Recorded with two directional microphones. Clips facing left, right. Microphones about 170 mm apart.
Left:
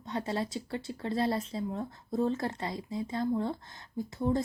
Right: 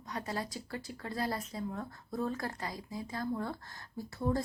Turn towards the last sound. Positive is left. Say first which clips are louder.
# left 4 dB
turn(degrees=20)  # may be behind; listen again after turning